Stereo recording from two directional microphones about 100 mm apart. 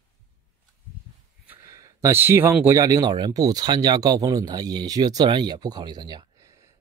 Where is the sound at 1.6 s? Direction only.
30° right (ahead or behind).